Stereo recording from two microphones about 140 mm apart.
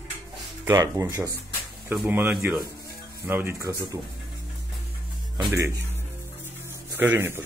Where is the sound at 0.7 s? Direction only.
25° right (ahead or behind).